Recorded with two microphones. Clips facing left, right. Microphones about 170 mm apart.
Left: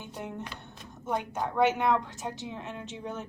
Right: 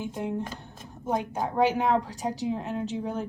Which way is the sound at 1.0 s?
35° right (ahead or behind).